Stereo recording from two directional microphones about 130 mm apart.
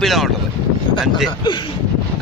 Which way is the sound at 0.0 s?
Centre (ahead or behind).